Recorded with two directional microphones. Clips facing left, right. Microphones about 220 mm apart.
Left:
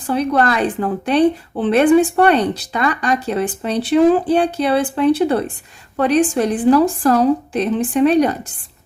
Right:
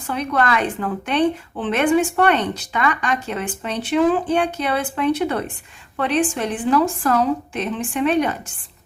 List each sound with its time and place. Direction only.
0.1 s a woman's voice: 35° left (ahead or behind)